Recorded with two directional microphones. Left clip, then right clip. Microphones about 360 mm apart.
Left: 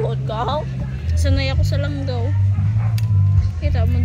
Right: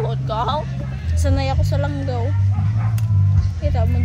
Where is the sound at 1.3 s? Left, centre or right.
Centre.